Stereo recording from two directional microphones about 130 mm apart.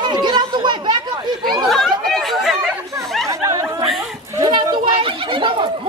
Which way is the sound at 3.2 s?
25° right (ahead or behind).